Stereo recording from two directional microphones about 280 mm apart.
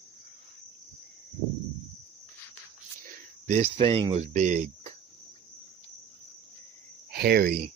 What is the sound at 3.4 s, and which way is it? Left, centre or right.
Speech, right.